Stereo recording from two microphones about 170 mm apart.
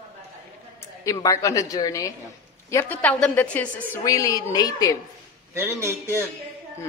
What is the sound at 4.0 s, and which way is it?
Speech, 20° left (ahead or behind).